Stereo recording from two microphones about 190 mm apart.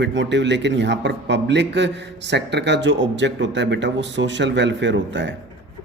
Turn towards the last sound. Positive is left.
turn(degrees=-70)  # may be behind; listen again after turning